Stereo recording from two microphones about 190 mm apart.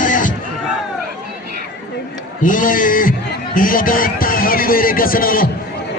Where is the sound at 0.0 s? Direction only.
45° left (ahead or behind).